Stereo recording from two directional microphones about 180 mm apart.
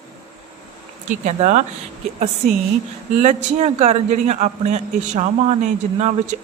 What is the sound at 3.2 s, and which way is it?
A man's voice, 40° right (ahead or behind).